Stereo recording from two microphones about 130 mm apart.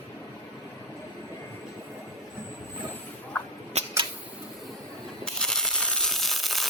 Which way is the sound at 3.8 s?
55° right (ahead or behind).